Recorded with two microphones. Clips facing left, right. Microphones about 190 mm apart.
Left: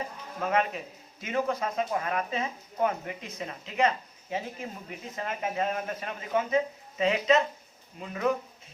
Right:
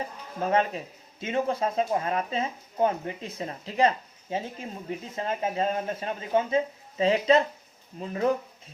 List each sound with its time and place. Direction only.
0.4 s speech: 30° right (ahead or behind)